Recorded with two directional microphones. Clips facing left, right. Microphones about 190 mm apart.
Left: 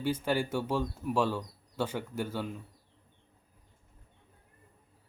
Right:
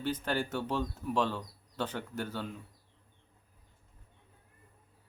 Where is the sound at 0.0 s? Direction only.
10° left (ahead or behind).